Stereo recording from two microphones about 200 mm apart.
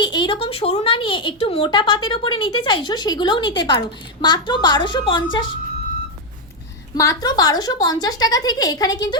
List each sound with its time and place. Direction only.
0.1 s speech: 25° left (ahead or behind)
6.9 s a woman's voice: 15° left (ahead or behind)